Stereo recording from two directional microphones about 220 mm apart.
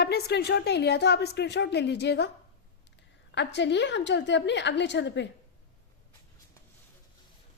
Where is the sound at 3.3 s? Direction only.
55° left (ahead or behind).